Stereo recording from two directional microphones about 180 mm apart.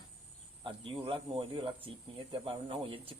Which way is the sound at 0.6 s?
30° right (ahead or behind).